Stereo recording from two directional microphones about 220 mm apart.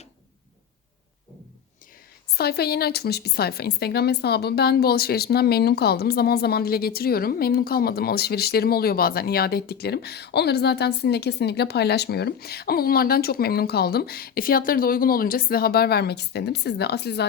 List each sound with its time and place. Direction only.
2.3 s a woman's voice: 45° left (ahead or behind)